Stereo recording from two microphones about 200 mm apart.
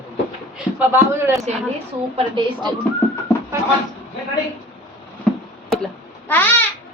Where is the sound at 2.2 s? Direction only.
25° right (ahead or behind).